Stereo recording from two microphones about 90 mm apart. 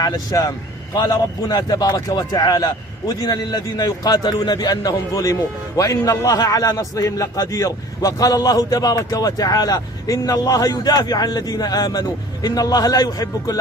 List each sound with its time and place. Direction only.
0.0 s a man's voice: 45° left (ahead or behind)